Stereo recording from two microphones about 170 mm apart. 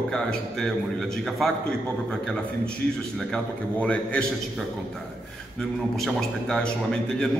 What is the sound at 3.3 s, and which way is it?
Speech, 5° left (ahead or behind).